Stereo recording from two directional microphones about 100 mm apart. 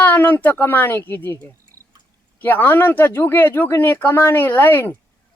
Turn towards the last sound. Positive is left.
turn(degrees=20)  # may be behind; listen again after turning